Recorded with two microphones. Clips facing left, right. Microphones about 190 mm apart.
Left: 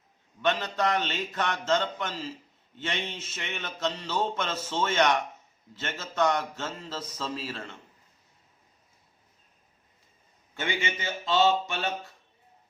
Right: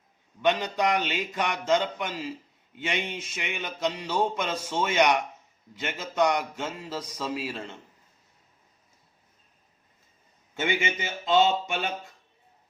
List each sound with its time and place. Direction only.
0.4 s speech: 15° right (ahead or behind)
10.5 s a man's voice: 20° right (ahead or behind)